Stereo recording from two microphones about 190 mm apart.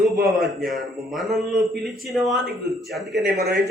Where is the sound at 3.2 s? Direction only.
55° right (ahead or behind).